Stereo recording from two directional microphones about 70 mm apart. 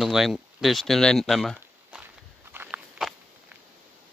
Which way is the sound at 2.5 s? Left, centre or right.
Right.